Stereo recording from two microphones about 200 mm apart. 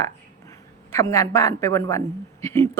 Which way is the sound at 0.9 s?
15° left (ahead or behind).